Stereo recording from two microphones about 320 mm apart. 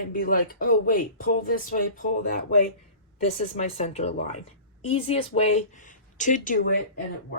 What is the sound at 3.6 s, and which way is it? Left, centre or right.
Speech, left.